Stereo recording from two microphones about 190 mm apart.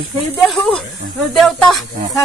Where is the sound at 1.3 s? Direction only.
Centre (ahead or behind).